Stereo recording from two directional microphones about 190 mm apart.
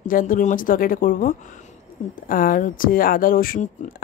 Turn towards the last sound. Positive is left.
turn(degrees=45)  # may be behind; listen again after turning